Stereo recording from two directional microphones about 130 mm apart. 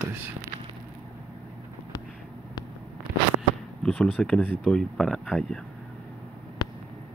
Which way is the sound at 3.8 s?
10° left (ahead or behind).